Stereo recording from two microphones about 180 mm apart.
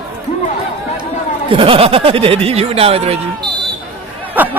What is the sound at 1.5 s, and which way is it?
Speech, 30° right (ahead or behind).